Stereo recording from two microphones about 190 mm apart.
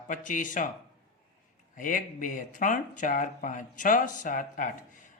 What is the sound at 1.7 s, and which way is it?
Speech, 45° left (ahead or behind).